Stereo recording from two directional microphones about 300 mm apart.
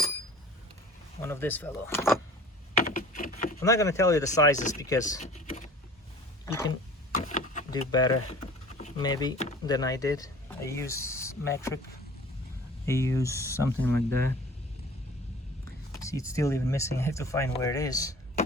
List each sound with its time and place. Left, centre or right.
1.2 s speech: centre
2.7 s vehicle: left
3.6 s speech: centre
4.5 s speech: left
4.8 s speech: centre
5.0 s typing: left
6.4 s a sound: centre
7.1 s vehicle: left
7.7 s speech: centre
12.8 s speech: centre
16.0 s speech: centre